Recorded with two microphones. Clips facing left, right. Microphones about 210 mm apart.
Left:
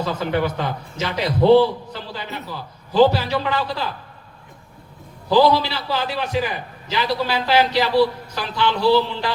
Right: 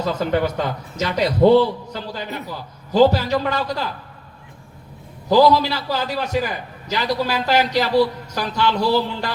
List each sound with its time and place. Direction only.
0.0 s a man's voice: 45° right (ahead or behind)
5.3 s a man's voice: 45° right (ahead or behind)